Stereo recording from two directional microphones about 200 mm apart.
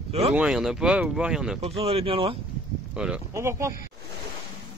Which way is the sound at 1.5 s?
30° right (ahead or behind).